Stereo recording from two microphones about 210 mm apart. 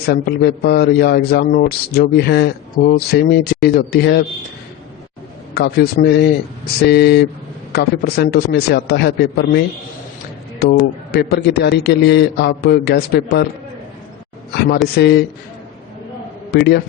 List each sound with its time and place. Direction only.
0.0 s a man's voice: 50° left (ahead or behind)
5.5 s a man's voice: 50° left (ahead or behind)
10.6 s a man's voice: 50° left (ahead or behind)
14.9 s a man's voice: 50° left (ahead or behind)
16.5 s a man's voice: 50° left (ahead or behind)